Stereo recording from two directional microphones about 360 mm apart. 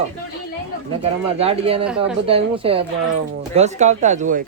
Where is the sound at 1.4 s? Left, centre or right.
Centre.